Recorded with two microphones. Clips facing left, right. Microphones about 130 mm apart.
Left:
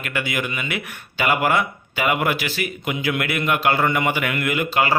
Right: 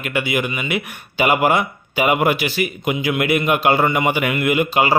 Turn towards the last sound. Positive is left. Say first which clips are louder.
# right 4 dB
turn(degrees=-15)  # may be behind; listen again after turning